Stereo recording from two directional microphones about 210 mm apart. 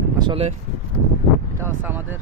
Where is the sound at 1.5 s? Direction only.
10° right (ahead or behind).